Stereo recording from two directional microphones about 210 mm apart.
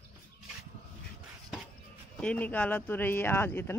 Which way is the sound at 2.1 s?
5° left (ahead or behind).